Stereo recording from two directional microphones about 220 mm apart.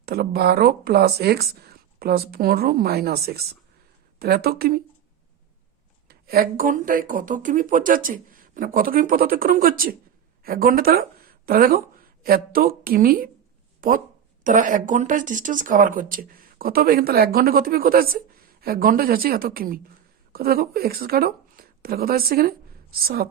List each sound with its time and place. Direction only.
0.0 s speech: 45° right (ahead or behind)
6.1 s speech: 45° right (ahead or behind)